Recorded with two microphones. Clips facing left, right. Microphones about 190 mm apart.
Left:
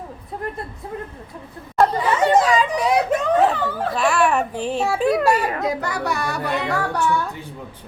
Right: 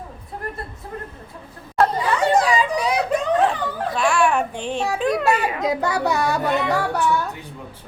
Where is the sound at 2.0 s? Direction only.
20° left (ahead or behind).